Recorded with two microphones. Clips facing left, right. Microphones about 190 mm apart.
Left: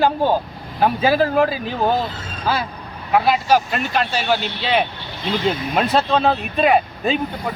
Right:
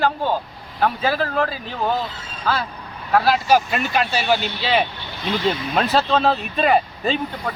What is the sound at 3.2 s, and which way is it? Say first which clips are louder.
Speech: right 1 dB; 5° right (ahead or behind).